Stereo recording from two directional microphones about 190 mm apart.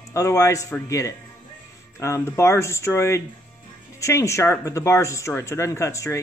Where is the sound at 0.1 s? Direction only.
15° left (ahead or behind).